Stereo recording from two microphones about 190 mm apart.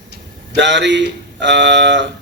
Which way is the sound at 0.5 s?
70° right (ahead or behind).